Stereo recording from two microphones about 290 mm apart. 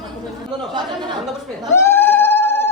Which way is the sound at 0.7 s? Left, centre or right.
Centre.